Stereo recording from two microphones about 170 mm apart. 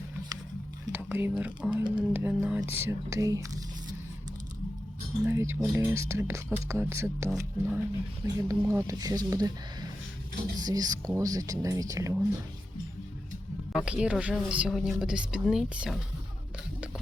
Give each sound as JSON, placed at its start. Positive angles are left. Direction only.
{"t": 0.9, "sound": "squish", "side_deg": -10}
{"t": 1.3, "sound": "speech", "side_deg": -5}
{"t": 5.2, "sound": "speech", "side_deg": -15}
{"t": 10.6, "sound": "speech", "side_deg": -20}
{"t": 13.7, "sound": "speech", "side_deg": -5}